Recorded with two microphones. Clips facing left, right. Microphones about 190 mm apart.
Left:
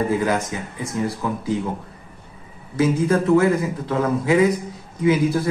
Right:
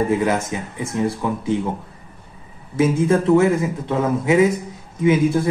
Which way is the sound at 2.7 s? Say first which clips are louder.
Right 2 dB; 25° right (ahead or behind).